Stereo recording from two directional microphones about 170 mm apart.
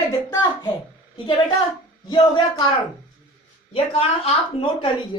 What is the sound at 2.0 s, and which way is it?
Speech, 25° left (ahead or behind).